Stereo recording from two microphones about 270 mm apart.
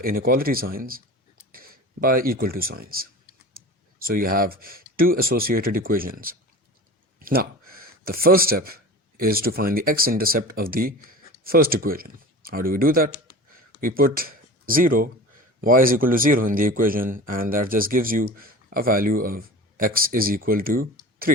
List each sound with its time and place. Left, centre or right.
0.0 s speech: right
13.5 s a sound: right
15.6 s speech: right